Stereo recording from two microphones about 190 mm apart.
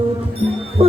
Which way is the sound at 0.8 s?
30° right (ahead or behind).